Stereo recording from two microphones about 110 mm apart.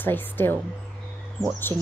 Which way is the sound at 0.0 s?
15° left (ahead or behind).